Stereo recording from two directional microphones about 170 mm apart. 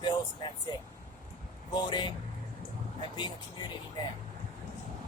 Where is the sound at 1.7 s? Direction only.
25° left (ahead or behind).